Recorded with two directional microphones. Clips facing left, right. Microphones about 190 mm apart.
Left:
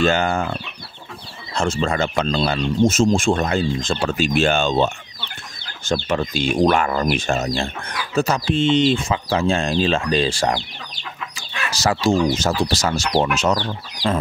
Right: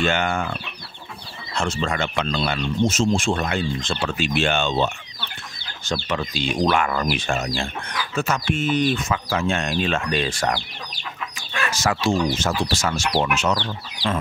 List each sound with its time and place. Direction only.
0.0 s speech: 35° left (ahead or behind)
2.9 s speech: 50° left (ahead or behind)
6.0 s speech: 45° left (ahead or behind); by 10.6 s 30° left (ahead or behind)
11.8 s speech: 35° left (ahead or behind)